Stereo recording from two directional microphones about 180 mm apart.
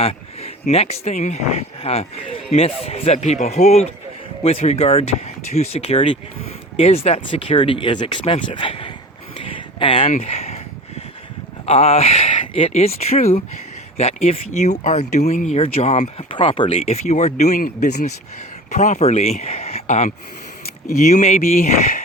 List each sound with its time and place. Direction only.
0.0 s speech: 35° left (ahead or behind)
9.3 s a sound: 30° left (ahead or behind)
10.1 s speech: 35° left (ahead or behind)
11.6 s speech: 35° left (ahead or behind)